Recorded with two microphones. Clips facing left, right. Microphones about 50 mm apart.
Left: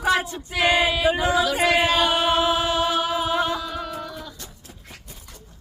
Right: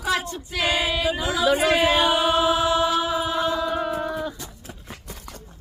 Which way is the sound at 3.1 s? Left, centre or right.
Left.